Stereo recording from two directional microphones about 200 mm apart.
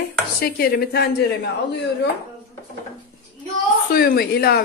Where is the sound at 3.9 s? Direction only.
50° left (ahead or behind).